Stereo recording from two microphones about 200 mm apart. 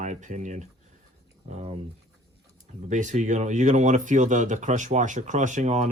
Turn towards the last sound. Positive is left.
turn(degrees=-35)  # may be behind; listen again after turning